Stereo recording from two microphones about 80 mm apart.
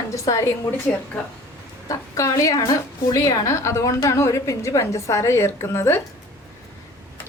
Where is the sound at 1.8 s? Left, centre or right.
Left.